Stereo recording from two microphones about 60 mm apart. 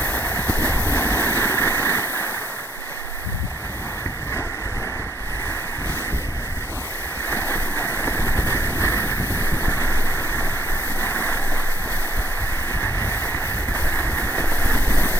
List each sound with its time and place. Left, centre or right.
0.0 s a sound: left
7.3 s vehicle: left
12.8 s vehicle: left